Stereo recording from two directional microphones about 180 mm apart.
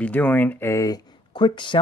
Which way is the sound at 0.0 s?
10° left (ahead or behind).